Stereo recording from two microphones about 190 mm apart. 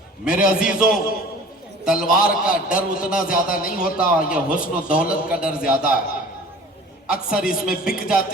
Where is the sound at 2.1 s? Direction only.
50° left (ahead or behind).